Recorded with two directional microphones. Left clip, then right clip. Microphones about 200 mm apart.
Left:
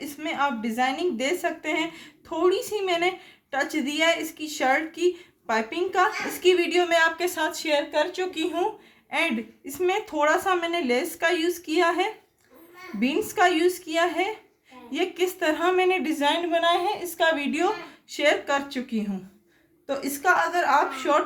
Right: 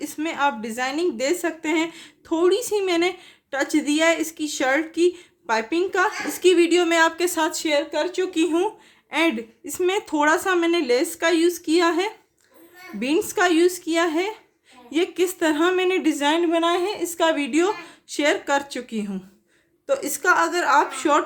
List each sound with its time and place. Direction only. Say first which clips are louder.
0.0 s speech: right 3 dB; 45° right (ahead or behind)